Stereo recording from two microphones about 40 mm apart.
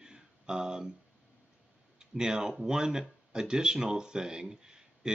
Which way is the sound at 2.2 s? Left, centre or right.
Centre.